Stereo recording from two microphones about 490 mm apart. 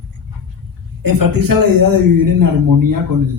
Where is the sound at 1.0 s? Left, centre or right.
Right.